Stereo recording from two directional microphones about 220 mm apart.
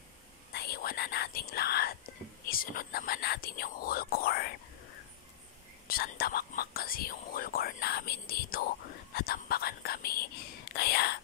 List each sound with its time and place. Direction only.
0.5 s whispering: 45° left (ahead or behind)
2.5 s speech: 40° left (ahead or behind)
5.9 s whispering: 45° left (ahead or behind)